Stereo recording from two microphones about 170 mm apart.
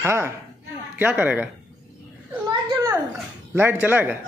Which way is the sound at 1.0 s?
10° right (ahead or behind).